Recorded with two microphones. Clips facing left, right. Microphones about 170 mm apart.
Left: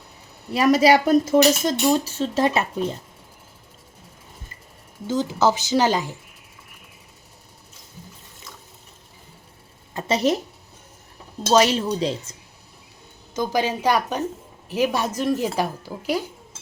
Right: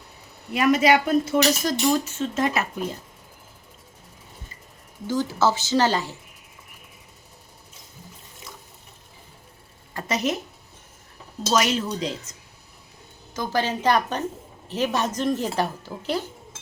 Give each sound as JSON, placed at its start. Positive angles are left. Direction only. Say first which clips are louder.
{"t": 0.5, "sound": "speech", "louder": "left 3 dB", "side_deg": 35}
{"t": 5.0, "sound": "speech", "louder": "left 2 dB", "side_deg": 20}
{"t": 9.9, "sound": "a sound", "louder": "left 5 dB", "side_deg": 25}
{"t": 11.5, "sound": "speech", "louder": "left 5 dB", "side_deg": 30}
{"t": 13.3, "sound": "speech", "louder": "left 2 dB", "side_deg": 15}